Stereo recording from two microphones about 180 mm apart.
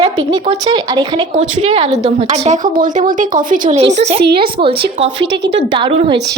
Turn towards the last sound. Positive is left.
turn(degrees=-25)  # may be behind; listen again after turning